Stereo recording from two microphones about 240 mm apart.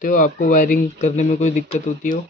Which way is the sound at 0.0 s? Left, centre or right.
Left.